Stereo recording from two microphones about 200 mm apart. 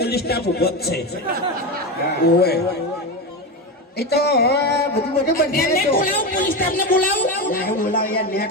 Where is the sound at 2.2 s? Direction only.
55° left (ahead or behind).